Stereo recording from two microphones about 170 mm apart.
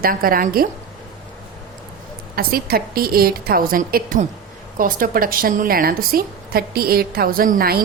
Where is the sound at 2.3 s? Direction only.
60° right (ahead or behind).